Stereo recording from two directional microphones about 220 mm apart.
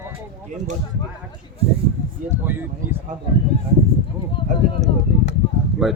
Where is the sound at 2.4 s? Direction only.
10° right (ahead or behind).